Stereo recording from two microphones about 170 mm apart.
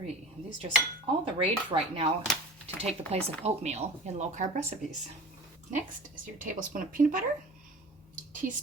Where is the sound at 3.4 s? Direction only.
40° right (ahead or behind).